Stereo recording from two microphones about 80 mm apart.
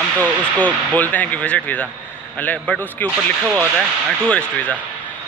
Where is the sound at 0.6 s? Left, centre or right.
Centre.